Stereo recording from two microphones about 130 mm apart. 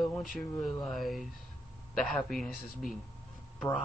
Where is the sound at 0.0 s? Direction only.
Centre (ahead or behind).